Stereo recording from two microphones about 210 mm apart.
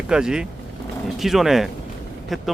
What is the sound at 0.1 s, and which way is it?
Speech, 5° right (ahead or behind).